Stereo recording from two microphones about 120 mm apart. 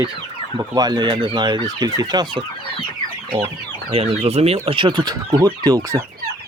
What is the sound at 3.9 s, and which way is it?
Speech, 55° right (ahead or behind).